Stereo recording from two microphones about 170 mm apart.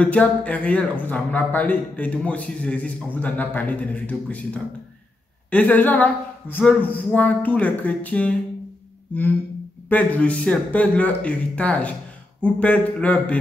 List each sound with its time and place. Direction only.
0.0 s speech: 10° left (ahead or behind)
5.5 s speech: 10° left (ahead or behind)
9.8 s speech: 10° left (ahead or behind)